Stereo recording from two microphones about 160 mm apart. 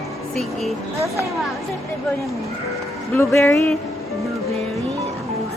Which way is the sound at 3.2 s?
15° left (ahead or behind).